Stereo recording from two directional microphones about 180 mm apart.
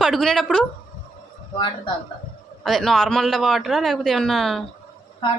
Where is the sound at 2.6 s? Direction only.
Centre (ahead or behind).